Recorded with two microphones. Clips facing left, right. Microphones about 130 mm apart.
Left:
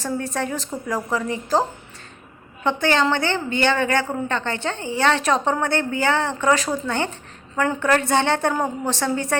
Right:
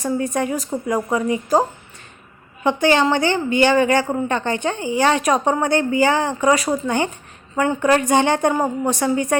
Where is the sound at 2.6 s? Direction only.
15° right (ahead or behind).